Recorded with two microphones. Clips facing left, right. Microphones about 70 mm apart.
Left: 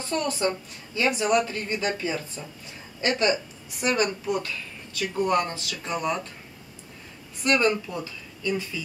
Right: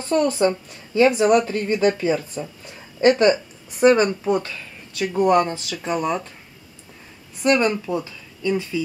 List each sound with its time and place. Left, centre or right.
0.1 s a woman's voice: right
7.5 s speech: centre
7.8 s speech: right